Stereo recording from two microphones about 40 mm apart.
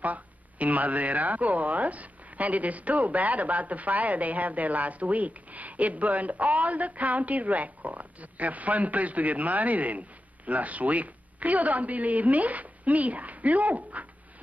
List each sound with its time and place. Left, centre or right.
0.0 s speech: right